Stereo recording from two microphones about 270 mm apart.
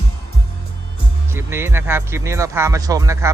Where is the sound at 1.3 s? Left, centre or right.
Centre.